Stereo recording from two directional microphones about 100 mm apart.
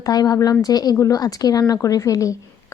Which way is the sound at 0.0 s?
40° left (ahead or behind).